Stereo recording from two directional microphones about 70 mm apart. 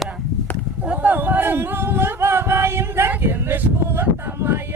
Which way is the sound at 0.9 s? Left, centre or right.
Right.